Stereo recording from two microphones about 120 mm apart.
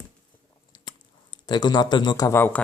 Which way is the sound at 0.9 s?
40° left (ahead or behind).